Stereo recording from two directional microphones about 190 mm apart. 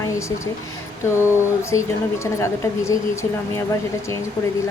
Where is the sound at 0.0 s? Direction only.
15° left (ahead or behind).